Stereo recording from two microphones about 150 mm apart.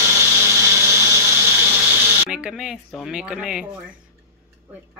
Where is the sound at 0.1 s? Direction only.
15° right (ahead or behind).